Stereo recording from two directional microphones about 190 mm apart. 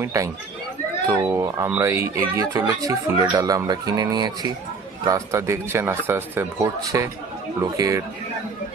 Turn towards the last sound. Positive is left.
turn(degrees=-20)  # may be behind; listen again after turning